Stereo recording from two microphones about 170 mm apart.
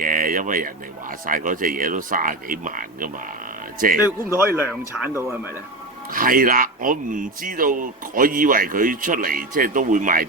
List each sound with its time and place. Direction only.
0.0 s speech: 55° right (ahead or behind)
4.2 s speech: 15° right (ahead or behind)
6.1 s speech: 55° right (ahead or behind)